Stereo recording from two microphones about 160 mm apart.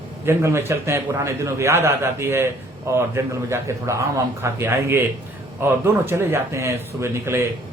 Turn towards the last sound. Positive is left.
turn(degrees=-15)  # may be behind; listen again after turning